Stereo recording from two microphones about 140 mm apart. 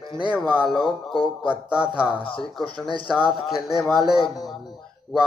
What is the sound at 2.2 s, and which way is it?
Speech, 40° left (ahead or behind).